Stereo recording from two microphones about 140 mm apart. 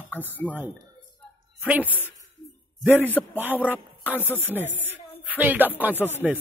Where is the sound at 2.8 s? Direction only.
15° right (ahead or behind).